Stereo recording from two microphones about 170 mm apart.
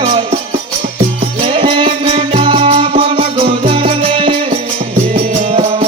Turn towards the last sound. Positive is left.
turn(degrees=-30)  # may be behind; listen again after turning